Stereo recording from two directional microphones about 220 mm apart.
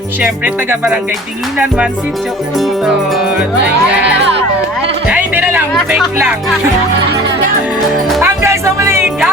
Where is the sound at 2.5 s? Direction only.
Centre (ahead or behind).